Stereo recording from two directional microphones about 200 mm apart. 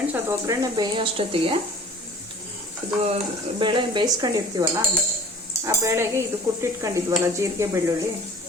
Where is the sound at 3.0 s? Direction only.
30° right (ahead or behind).